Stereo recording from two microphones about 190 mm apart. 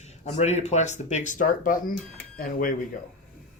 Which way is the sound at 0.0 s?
35° left (ahead or behind).